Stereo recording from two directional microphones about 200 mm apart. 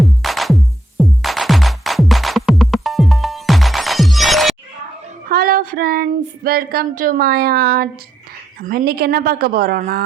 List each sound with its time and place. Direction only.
0.0 s music: centre (ahead or behind)
5.3 s a sound: 45° right (ahead or behind)
8.6 s a woman's voice: 50° right (ahead or behind)